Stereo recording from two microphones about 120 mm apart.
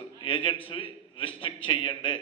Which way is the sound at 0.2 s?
45° left (ahead or behind).